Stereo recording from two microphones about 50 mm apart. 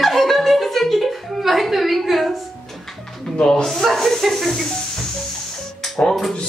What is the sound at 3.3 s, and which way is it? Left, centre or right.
Music, centre.